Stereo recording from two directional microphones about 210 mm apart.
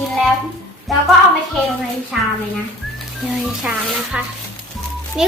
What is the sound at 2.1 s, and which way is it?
Speech, centre (ahead or behind).